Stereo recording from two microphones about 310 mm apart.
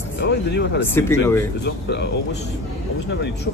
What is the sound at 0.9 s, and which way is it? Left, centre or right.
Speech, centre.